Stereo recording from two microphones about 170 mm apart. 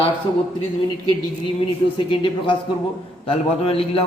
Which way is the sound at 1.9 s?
30° left (ahead or behind).